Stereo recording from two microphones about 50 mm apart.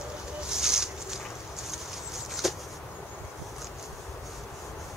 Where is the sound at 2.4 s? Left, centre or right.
Centre.